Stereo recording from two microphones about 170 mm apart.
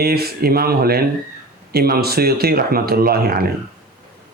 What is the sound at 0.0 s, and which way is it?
Speech, 65° right (ahead or behind).